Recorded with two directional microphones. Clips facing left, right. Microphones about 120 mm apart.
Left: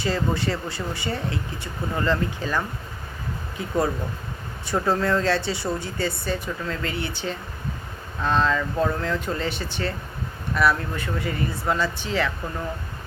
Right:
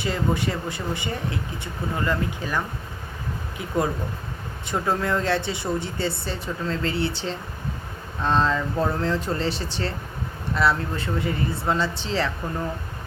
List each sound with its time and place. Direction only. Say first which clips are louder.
0.0 s speech: even; 15° right (ahead or behind)
4.7 s speech: left 2 dB; 15° right (ahead or behind)